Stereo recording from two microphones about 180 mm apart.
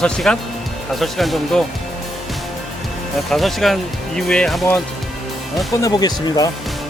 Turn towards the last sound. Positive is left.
turn(degrees=20)  # may be behind; listen again after turning